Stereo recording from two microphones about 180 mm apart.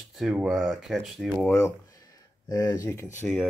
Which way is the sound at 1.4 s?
15° left (ahead or behind).